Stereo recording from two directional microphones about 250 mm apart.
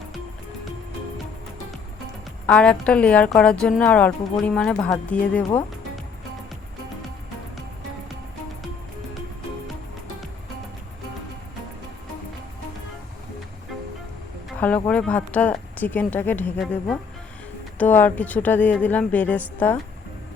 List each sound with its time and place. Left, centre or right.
2.5 s speech: centre
14.8 s speech: centre